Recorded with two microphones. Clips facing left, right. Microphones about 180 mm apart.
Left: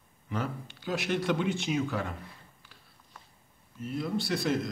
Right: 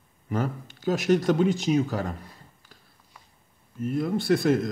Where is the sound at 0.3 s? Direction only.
45° right (ahead or behind).